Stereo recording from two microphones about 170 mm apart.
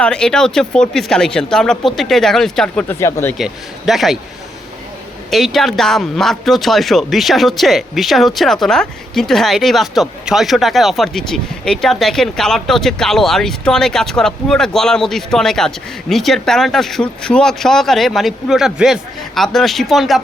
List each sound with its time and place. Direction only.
0.0 s speech: 5° left (ahead or behind)
3.0 s speech: 15° left (ahead or behind)
3.3 s speech: centre (ahead or behind)
5.3 s speech: centre (ahead or behind)